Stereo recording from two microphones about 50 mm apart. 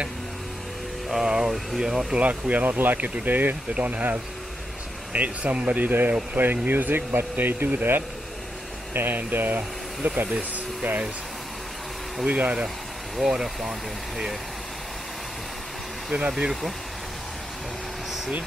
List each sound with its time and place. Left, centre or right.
1.2 s speech: centre
2.1 s speech: right
12.3 s speech: right
12.6 s speech: centre
16.1 s speech: right